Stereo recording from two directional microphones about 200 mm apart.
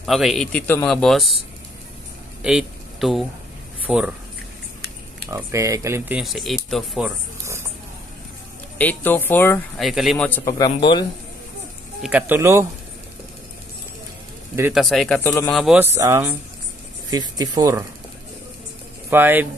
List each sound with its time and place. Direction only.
0.0 s speech: centre (ahead or behind)
2.4 s speech: centre (ahead or behind)
5.3 s speech: 15° right (ahead or behind); by 7.1 s centre (ahead or behind)
8.7 s speech: 10° left (ahead or behind)
9.8 s speech: centre (ahead or behind); by 11.1 s 20° left (ahead or behind)
12.0 s speech: 5° right (ahead or behind)
14.7 s speech: centre (ahead or behind); by 17.8 s 15° right (ahead or behind)
19.0 s speech: 10° right (ahead or behind)